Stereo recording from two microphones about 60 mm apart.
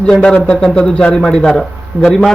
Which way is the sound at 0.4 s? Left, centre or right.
Centre.